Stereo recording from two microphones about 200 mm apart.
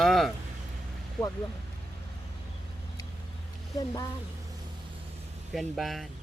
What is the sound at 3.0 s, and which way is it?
Vehicle, 20° left (ahead or behind).